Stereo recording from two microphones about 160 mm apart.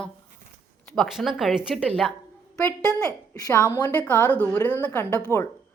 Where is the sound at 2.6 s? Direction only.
20° left (ahead or behind).